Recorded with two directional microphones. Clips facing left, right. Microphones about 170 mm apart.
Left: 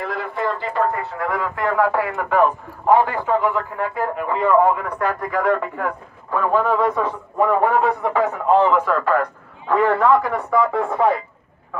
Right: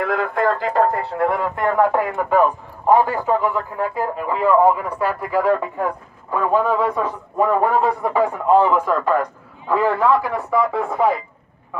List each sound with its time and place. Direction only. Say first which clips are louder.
0.3 s speech: right 4 dB; 45° right (ahead or behind); by 9.3 s 20° right (ahead or behind)
9.7 s speech: left 1 dB; 5° right (ahead or behind)